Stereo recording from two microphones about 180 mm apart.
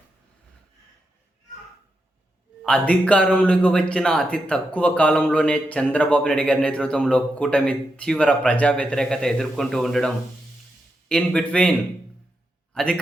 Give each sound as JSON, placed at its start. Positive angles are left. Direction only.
{"t": 2.6, "sound": "a man's voice", "side_deg": 5}
{"t": 12.7, "sound": "a man's voice", "side_deg": 5}